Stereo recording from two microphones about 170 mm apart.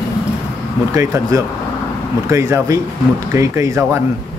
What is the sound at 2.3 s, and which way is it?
Speech, 15° right (ahead or behind).